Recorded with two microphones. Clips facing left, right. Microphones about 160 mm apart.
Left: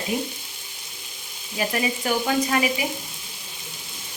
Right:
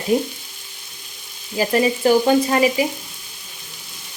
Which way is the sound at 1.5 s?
30° right (ahead or behind).